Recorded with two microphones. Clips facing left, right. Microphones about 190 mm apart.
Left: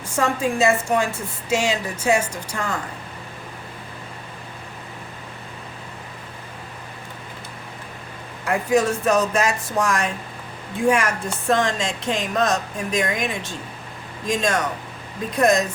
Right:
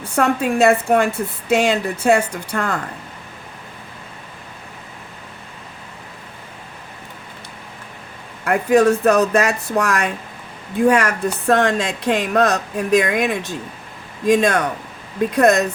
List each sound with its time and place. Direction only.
0.0 s a woman's voice: 60° right (ahead or behind)
8.4 s a woman's voice: 60° right (ahead or behind)